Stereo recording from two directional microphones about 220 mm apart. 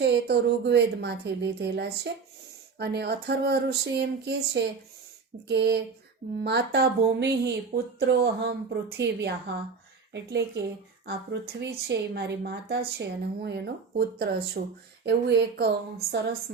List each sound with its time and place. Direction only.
0.0 s a woman's voice: 50° right (ahead or behind)